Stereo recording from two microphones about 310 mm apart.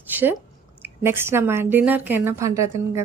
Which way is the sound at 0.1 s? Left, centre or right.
Centre.